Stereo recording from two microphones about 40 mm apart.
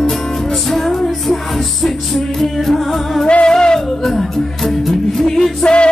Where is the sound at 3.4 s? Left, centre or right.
Centre.